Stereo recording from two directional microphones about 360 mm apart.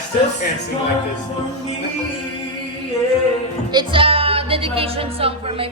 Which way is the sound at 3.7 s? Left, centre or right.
Centre.